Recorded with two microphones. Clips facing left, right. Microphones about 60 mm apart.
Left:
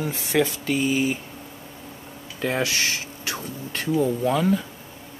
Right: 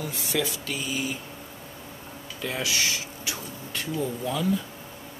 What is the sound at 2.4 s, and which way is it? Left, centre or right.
Speech, left.